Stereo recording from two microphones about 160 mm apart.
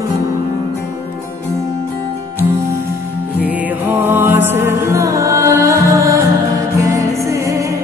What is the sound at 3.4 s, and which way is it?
Music, 10° right (ahead or behind).